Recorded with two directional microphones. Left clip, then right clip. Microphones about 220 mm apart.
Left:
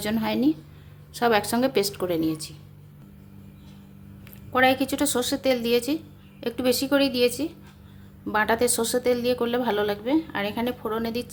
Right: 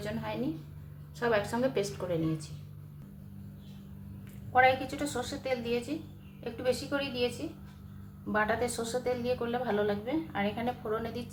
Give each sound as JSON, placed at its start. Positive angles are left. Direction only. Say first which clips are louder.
{"t": 0.0, "sound": "a woman's voice", "louder": "left 11 dB", "side_deg": 50}
{"t": 4.5, "sound": "a woman's voice", "louder": "left 4 dB", "side_deg": 50}
{"t": 8.3, "sound": "a woman's voice", "louder": "left 7 dB", "side_deg": 50}